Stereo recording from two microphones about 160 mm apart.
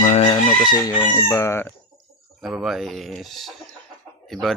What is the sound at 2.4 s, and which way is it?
Speech, centre (ahead or behind).